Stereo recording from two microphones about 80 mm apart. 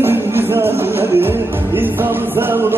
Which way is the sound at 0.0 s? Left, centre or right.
Right.